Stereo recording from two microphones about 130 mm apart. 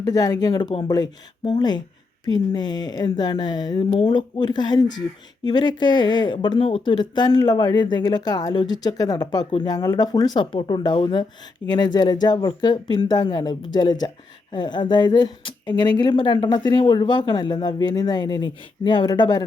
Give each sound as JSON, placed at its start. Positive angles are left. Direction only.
{"t": 0.0, "sound": "a woman's voice", "side_deg": 30}